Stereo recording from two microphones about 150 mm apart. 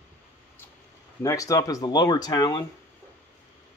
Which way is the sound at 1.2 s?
20° left (ahead or behind).